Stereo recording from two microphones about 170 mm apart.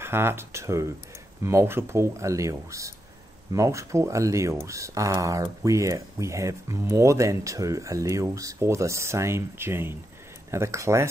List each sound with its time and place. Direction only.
0.0 s speech: 15° right (ahead or behind)